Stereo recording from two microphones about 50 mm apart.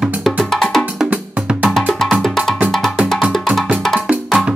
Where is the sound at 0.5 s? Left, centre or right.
Centre.